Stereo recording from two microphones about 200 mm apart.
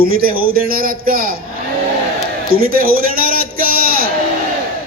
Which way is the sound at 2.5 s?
45° right (ahead or behind).